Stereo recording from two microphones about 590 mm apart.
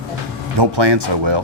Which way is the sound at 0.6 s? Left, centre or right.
Right.